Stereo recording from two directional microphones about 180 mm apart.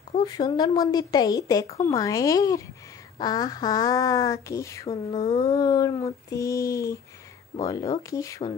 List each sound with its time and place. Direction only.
0.2 s speech: 20° left (ahead or behind)
4.8 s speech: 35° left (ahead or behind)
5.3 s speech: 20° left (ahead or behind)